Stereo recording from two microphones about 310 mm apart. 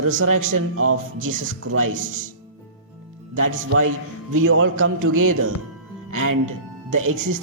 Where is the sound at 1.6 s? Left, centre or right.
Right.